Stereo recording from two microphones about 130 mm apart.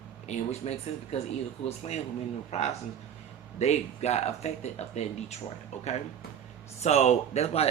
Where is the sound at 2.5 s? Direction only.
55° left (ahead or behind).